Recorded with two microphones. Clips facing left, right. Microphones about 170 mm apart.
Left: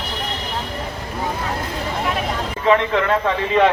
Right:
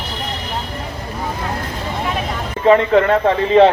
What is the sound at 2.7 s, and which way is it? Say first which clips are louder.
A man's voice: right 5 dB; 35° right (ahead or behind).